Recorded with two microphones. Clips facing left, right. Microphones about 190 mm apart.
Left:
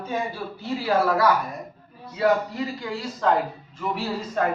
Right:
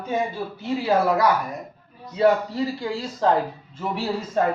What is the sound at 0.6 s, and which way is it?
Speech, 20° right (ahead or behind).